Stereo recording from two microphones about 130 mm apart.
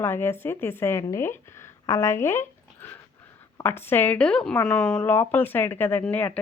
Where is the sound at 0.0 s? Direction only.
20° left (ahead or behind).